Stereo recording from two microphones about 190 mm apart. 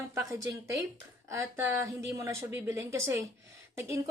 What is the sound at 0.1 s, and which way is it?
A woman's voice, 15° right (ahead or behind).